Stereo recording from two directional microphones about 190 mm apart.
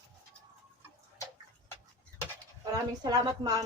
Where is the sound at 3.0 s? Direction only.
20° right (ahead or behind).